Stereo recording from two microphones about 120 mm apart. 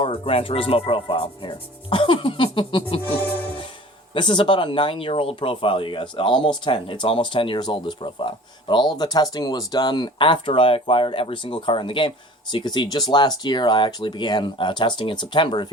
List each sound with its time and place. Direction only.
0.0 s speech: 50° left (ahead or behind)
4.1 s speech: 40° left (ahead or behind)